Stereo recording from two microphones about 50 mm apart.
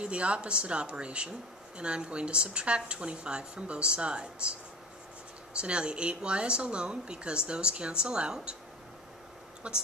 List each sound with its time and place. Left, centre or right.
0.0 s speech: right
5.6 s speech: right
9.6 s speech: right